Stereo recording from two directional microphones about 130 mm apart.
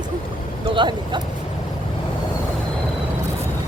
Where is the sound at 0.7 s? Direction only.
40° right (ahead or behind).